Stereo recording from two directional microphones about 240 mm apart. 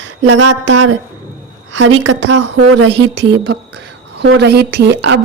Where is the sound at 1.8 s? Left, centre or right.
Right.